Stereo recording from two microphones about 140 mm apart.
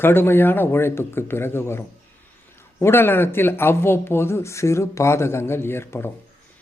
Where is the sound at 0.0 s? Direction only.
15° left (ahead or behind).